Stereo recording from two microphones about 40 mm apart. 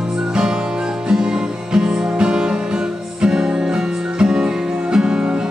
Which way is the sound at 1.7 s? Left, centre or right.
Centre.